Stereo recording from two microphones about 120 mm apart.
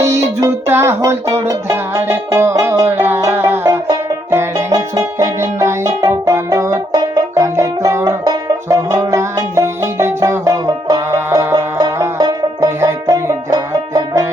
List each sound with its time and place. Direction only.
0.0 s music: 25° right (ahead or behind)